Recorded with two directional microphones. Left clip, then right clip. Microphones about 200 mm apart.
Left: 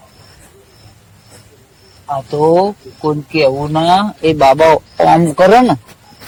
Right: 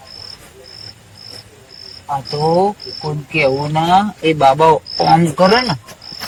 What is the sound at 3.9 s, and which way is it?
Speech, 25° left (ahead or behind).